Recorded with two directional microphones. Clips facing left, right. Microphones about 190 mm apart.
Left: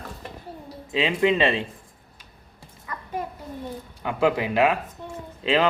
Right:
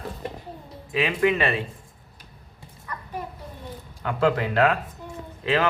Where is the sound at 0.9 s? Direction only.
25° left (ahead or behind).